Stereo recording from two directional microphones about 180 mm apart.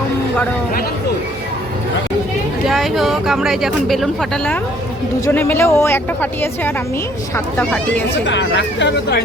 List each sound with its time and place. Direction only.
2.6 s speech: centre (ahead or behind)
7.3 s speech: 10° left (ahead or behind)
8.3 s speech: 85° left; by 9.2 s 70° left (ahead or behind)